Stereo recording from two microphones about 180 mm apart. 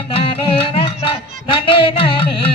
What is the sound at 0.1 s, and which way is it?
Music, 30° left (ahead or behind).